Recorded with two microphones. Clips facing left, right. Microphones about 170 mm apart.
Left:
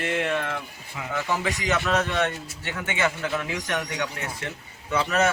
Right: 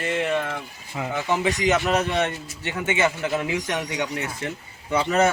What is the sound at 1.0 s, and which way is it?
A man's voice, 20° right (ahead or behind).